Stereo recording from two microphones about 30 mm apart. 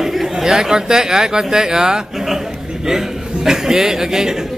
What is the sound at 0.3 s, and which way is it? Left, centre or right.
A man's voice, centre.